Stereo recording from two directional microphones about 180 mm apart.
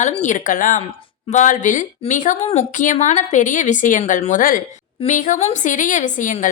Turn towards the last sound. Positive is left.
turn(degrees=45)  # may be behind; listen again after turning